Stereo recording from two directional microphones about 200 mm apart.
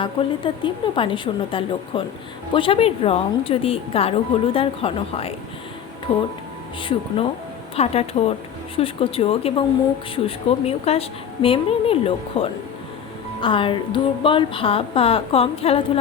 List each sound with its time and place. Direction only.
0.0 s a woman's voice: 25° left (ahead or behind)
7.8 s a woman's voice: 30° left (ahead or behind)